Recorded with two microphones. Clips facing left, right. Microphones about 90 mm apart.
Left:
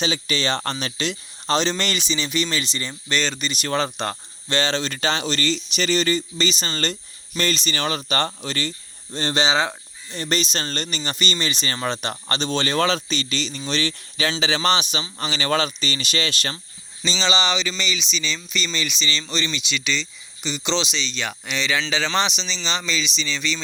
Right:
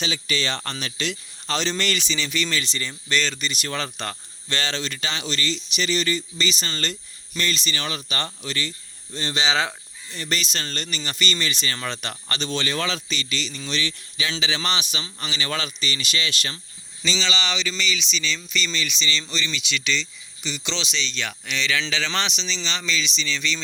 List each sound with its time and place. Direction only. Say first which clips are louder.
0.0 s speech: left 3 dB; 30° left (ahead or behind)
9.5 s fowl: left 2 dB; 20° left (ahead or behind)
10.2 s speech: left 4 dB; 30° left (ahead or behind)
17.1 s speech: left 4 dB; 25° left (ahead or behind)
19.3 s speech: left 2 dB; 30° left (ahead or behind)